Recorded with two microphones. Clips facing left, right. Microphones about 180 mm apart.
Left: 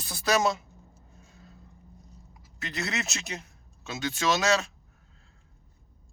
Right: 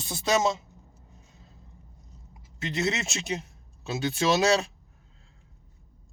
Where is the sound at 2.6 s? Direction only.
25° right (ahead or behind).